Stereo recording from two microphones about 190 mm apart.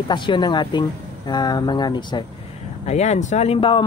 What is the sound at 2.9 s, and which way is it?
Speech, 35° left (ahead or behind).